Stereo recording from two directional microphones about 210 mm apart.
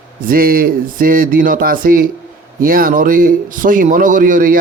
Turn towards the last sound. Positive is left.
turn(degrees=-40)  # may be behind; listen again after turning